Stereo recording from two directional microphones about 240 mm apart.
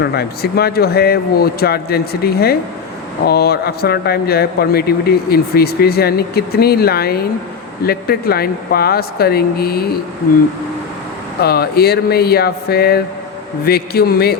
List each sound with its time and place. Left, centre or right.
0.0 s a man's voice: left
11.4 s a man's voice: left